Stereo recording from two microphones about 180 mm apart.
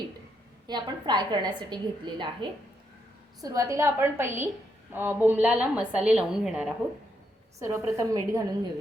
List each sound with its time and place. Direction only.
0.7 s a woman's voice: 25° right (ahead or behind); by 6.7 s 5° right (ahead or behind)
7.6 s a woman's voice: 15° right (ahead or behind)